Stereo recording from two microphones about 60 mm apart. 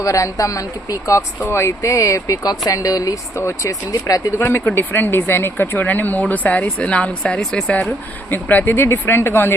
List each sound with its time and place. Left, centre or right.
0.0 s speech: left
1.5 s speech: left
3.3 s speech: left
3.7 s speech: left
4.4 s speech: left; by 7.8 s centre
8.3 s speech: left
8.7 s speech: left